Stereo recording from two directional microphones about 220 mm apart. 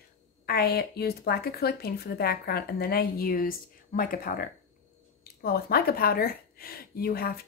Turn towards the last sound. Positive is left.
turn(degrees=45)  # may be behind; listen again after turning